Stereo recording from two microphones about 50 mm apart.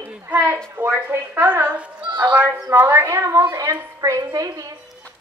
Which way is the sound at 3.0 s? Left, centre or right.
Right.